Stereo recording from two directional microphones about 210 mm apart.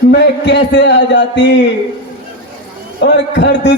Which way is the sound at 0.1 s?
55° left (ahead or behind).